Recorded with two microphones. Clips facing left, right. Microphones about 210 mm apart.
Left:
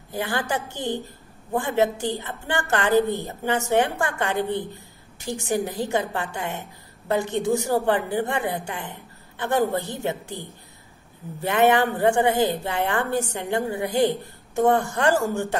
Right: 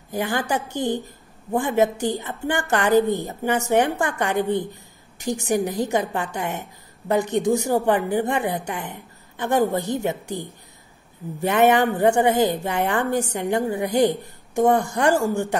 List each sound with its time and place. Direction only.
0.1 s a woman's voice: 15° right (ahead or behind)